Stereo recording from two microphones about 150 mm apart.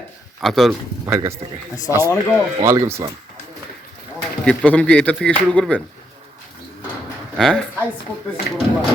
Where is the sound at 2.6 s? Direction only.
20° right (ahead or behind).